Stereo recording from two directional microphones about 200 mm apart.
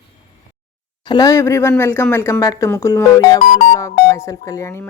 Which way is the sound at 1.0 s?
20° left (ahead or behind).